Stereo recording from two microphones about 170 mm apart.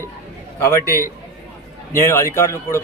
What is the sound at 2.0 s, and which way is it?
Speech, 15° left (ahead or behind).